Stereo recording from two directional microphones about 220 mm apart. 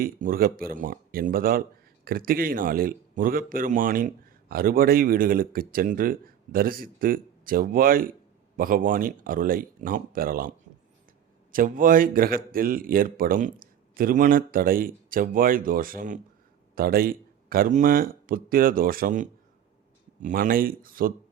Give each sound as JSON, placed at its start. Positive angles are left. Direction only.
{"t": 0.0, "sound": "speech", "side_deg": -40}
{"t": 11.5, "sound": "speech", "side_deg": -40}